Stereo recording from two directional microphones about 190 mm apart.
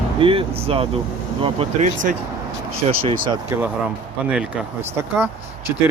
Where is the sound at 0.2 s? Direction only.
30° right (ahead or behind).